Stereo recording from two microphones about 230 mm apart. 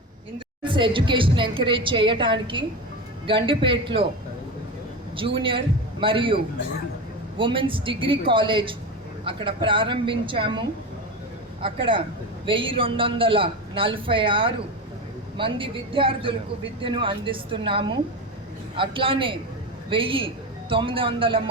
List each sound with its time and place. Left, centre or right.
0.6 s a woman's voice: right
5.1 s a woman's voice: right